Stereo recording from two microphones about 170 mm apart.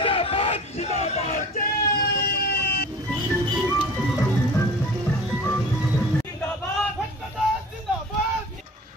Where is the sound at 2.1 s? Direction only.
65° left (ahead or behind).